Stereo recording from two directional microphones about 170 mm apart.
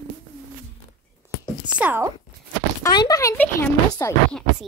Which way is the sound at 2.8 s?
25° left (ahead or behind).